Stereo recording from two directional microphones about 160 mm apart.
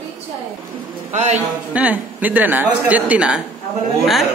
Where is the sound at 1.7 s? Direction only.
10° right (ahead or behind).